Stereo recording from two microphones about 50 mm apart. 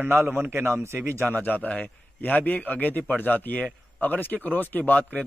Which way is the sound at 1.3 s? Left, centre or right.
Left.